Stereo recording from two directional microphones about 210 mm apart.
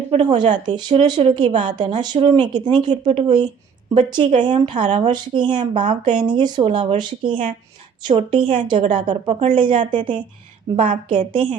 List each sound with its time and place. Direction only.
0.1 s speech: 25° right (ahead or behind)